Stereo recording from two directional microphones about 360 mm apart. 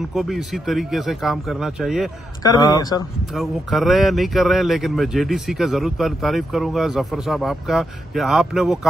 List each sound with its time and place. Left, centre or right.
0.1 s speech: centre
2.4 s speech: centre
3.3 s speech: centre